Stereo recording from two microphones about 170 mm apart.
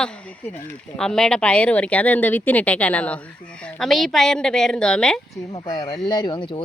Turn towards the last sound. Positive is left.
turn(degrees=25)  # may be behind; listen again after turning